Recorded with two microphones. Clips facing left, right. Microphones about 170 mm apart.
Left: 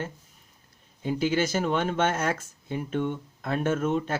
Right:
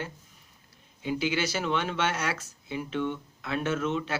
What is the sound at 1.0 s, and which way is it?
Speech, 45° left (ahead or behind).